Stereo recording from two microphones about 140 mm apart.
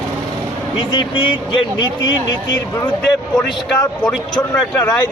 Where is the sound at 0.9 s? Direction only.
35° left (ahead or behind).